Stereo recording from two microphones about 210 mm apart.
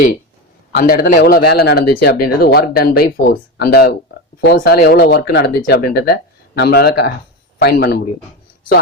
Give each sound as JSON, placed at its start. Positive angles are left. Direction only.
{"t": 0.7, "sound": "speech", "side_deg": 45}